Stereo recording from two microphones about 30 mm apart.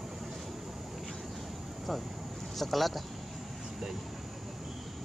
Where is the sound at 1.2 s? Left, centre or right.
Centre.